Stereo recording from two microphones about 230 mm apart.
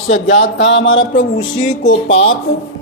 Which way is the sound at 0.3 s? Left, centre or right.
Left.